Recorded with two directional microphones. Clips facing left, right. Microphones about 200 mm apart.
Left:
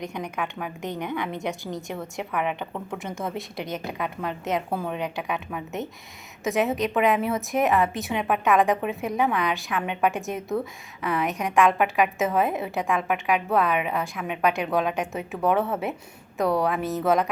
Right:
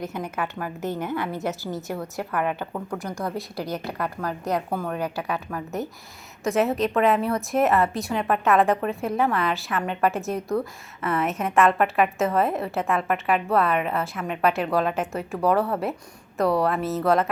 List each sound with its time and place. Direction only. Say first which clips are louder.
0.0 s a woman's voice: right 1 dB; 5° right (ahead or behind)